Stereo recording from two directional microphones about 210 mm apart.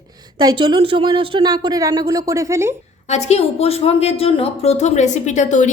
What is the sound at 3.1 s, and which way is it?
A woman's voice, 30° left (ahead or behind).